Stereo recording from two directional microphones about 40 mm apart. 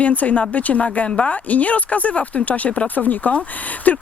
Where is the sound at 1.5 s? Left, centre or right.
Left.